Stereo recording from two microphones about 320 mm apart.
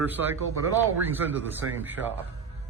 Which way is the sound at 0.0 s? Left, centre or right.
Centre.